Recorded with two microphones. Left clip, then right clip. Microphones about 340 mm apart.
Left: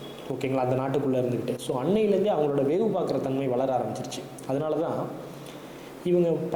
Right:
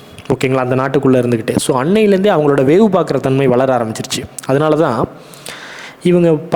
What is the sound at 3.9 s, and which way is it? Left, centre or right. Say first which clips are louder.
Speech: right 12 dB; right.